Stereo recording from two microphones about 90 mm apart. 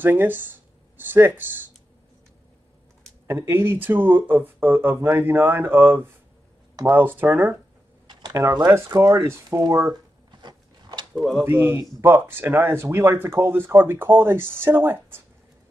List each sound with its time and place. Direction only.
0.0 s speech: 20° right (ahead or behind)
3.3 s speech: 25° right (ahead or behind)
7.2 s speech: 10° right (ahead or behind)
8.3 s speech: 45° right (ahead or behind)
10.4 s a sound: 55° right (ahead or behind)
11.1 s speech: centre (ahead or behind)
11.4 s speech: 25° right (ahead or behind)